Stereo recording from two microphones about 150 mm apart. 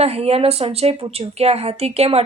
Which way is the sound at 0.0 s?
45° right (ahead or behind).